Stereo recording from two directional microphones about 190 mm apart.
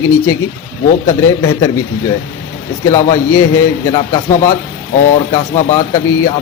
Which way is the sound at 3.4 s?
15° left (ahead or behind).